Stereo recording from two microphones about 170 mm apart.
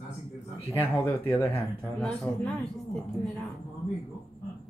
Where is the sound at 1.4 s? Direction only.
10° left (ahead or behind).